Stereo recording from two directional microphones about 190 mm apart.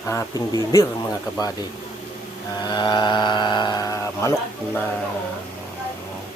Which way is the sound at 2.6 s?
25° left (ahead or behind).